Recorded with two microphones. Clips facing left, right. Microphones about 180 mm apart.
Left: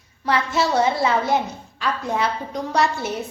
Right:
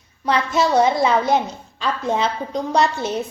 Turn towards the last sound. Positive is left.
turn(degrees=-20)  # may be behind; listen again after turning